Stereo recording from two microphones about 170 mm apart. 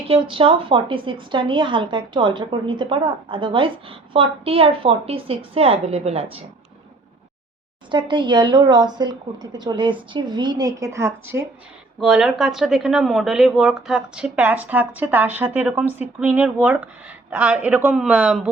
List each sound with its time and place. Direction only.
0.1 s a woman's voice: 30° right (ahead or behind)
7.9 s a woman's voice: 30° right (ahead or behind)
11.9 s speech: 5° right (ahead or behind)